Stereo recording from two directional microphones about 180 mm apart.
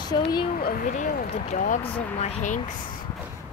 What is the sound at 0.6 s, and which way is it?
Speech, 50° left (ahead or behind).